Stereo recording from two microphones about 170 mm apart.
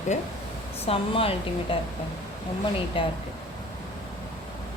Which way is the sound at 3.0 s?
30° left (ahead or behind).